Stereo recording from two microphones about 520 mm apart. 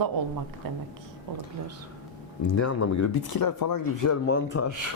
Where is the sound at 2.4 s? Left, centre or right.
Left.